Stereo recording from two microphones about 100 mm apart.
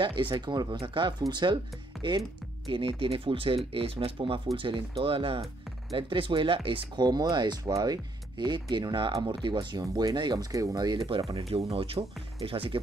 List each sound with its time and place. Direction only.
0.0 s speech: 55° right (ahead or behind)
2.0 s music: 5° left (ahead or behind)
2.7 s speech: 60° right (ahead or behind)
7.1 s speech: 45° right (ahead or behind)
11.1 s speech: 65° right (ahead or behind)